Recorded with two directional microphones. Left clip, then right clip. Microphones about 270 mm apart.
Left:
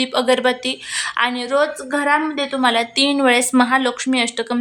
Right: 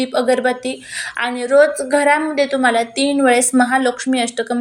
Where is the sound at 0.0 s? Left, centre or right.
Centre.